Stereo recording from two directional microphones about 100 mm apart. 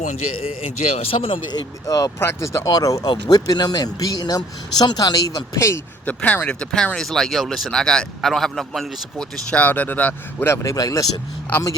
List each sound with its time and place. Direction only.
0.8 s speech: 90° left; by 1.4 s 70° left (ahead or behind)
1.5 s speech: 40° left (ahead or behind)
2.1 s speech: 25° left (ahead or behind)
6.1 s speech: 15° left (ahead or behind)
10.5 s speech: 30° left (ahead or behind)